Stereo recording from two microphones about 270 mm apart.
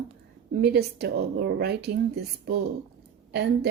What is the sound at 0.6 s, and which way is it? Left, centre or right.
Speech, right.